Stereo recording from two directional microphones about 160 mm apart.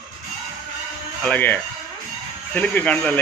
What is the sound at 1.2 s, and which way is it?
Speech, 10° left (ahead or behind).